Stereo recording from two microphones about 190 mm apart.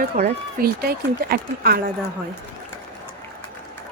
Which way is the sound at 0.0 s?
50° right (ahead or behind).